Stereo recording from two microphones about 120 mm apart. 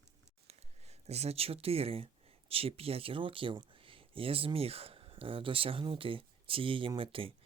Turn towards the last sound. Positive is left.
turn(degrees=-50)  # may be behind; listen again after turning